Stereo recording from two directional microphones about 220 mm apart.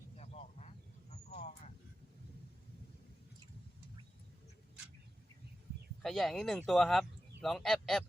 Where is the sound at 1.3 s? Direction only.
30° left (ahead or behind).